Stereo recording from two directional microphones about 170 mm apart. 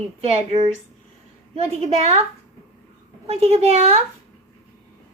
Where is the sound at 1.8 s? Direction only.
40° right (ahead or behind).